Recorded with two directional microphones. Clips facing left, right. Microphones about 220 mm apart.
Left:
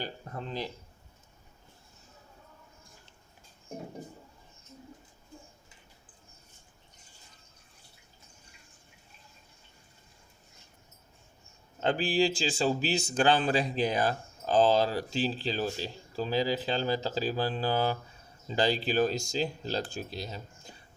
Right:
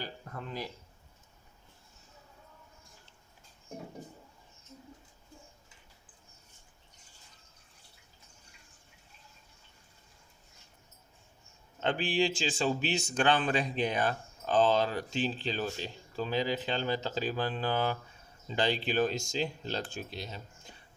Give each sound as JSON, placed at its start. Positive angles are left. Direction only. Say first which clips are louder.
{"t": 0.0, "sound": "speech", "louder": "left 3 dB", "side_deg": 25}
{"t": 11.8, "sound": "speech", "louder": "left 3 dB", "side_deg": 40}